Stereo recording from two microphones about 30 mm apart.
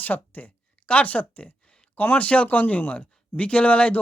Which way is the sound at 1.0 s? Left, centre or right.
Left.